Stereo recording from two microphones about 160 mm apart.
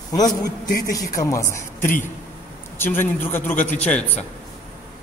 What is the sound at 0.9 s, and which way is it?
A man's voice, 20° left (ahead or behind).